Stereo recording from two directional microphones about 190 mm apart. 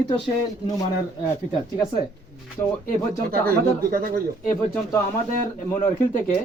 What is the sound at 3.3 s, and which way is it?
Speech, 50° right (ahead or behind).